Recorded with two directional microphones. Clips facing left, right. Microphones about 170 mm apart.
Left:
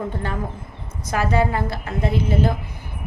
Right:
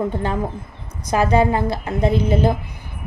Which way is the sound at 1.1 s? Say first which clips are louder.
Right 4 dB; 20° right (ahead or behind).